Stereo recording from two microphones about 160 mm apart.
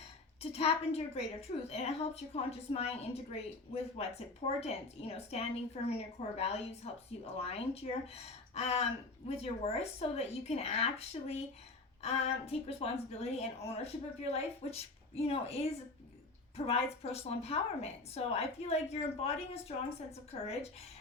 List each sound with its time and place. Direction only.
0.5 s a woman's voice: 40° left (ahead or behind)
4.4 s a woman's voice: 40° left (ahead or behind)